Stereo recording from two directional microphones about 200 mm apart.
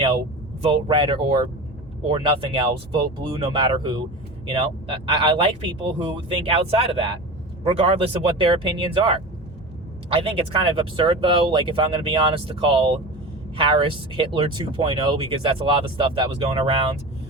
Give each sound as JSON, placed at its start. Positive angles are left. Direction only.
{"t": 0.6, "sound": "speech", "side_deg": -25}